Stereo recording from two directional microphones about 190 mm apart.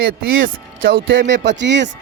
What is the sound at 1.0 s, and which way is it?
Speech, 75° right (ahead or behind).